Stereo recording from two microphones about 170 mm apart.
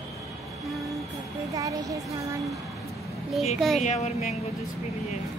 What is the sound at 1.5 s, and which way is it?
Speech, 20° right (ahead or behind).